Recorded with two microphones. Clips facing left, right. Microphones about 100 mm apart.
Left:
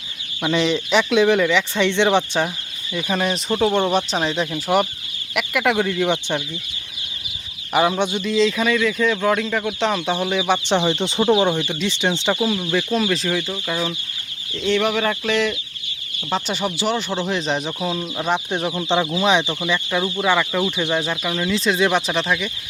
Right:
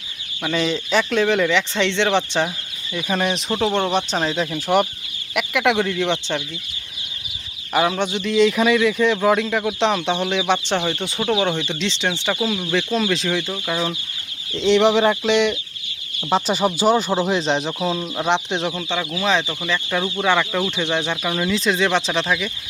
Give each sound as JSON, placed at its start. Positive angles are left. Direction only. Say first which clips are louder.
{"t": 0.6, "sound": "speech", "louder": "left 1 dB", "side_deg": 5}
{"t": 2.9, "sound": "speech", "louder": "even", "side_deg": 0}
{"t": 7.7, "sound": "speech", "louder": "left 1 dB", "side_deg": 5}
{"t": 8.4, "sound": "speech", "louder": "right 3 dB", "side_deg": -10}
{"t": 12.4, "sound": "speech", "louder": "left 1 dB", "side_deg": 0}
{"t": 14.5, "sound": "speech", "louder": "right 4 dB", "side_deg": -20}
{"t": 16.8, "sound": "speech", "louder": "right 6 dB", "side_deg": -40}
{"t": 17.2, "sound": "speech", "louder": "right 3 dB", "side_deg": -30}
{"t": 17.7, "sound": "speech", "louder": "right 2 dB", "side_deg": 0}
{"t": 18.3, "sound": "speech", "louder": "right 1 dB", "side_deg": 10}
{"t": 18.9, "sound": "speech", "louder": "left 5 dB", "side_deg": 25}
{"t": 19.5, "sound": "speech", "louder": "left 1 dB", "side_deg": 5}